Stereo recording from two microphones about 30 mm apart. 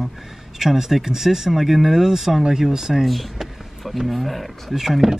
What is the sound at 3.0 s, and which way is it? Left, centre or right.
Speech, centre.